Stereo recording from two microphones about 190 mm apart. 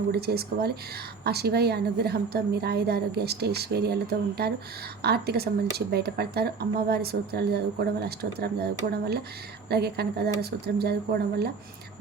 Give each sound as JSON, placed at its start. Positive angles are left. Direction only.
{"t": 0.1, "sound": "speech", "side_deg": -55}